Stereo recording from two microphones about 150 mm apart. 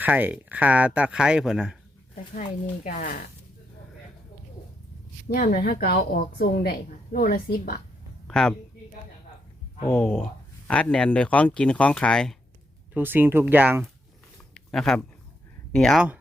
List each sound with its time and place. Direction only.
0.0 s speech: 10° right (ahead or behind)
2.3 s speech: 65° left (ahead or behind)
5.3 s a woman's voice: 70° left (ahead or behind)
8.3 s speech: 5° left (ahead or behind)
9.9 s speech: 5° left (ahead or behind)
12.9 s speech: 15° right (ahead or behind)
14.5 s a sound: centre (ahead or behind)
15.7 s speech: 5° left (ahead or behind)